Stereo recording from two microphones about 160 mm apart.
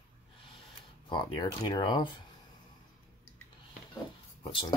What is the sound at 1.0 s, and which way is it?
Speech, 30° left (ahead or behind).